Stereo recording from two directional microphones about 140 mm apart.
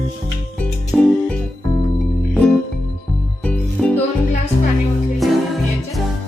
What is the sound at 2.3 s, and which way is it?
Music, 5° left (ahead or behind).